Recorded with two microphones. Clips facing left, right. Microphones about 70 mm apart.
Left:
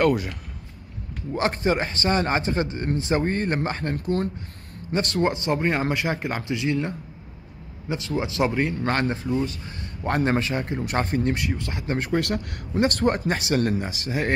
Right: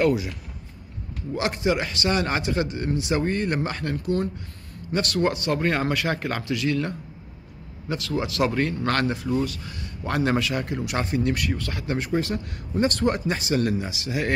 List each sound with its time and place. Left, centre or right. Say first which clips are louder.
0.0 s speech: left 1 dB; left
1.3 s speech: left 1 dB; left
4.9 s speech: even; left
9.0 s speech: even; left
11.3 s speech: even; left
12.0 s speech: left 2 dB; left